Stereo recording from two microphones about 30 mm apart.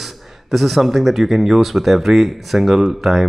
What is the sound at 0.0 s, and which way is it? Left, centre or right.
Speech, centre.